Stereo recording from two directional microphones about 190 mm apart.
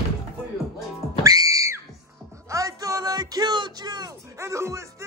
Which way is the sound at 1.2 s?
20° right (ahead or behind).